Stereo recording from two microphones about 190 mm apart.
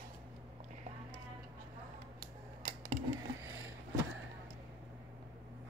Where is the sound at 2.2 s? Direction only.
45° right (ahead or behind).